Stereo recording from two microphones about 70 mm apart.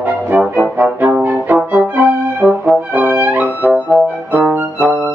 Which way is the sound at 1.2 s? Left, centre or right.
Right.